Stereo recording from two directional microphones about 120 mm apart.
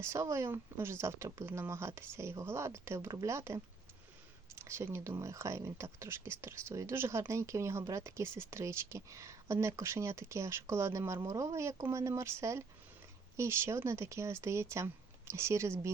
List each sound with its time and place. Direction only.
0.0 s speech: 25° right (ahead or behind)